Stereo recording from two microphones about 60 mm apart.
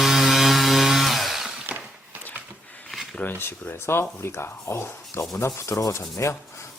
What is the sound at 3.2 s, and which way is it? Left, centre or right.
Speech, left.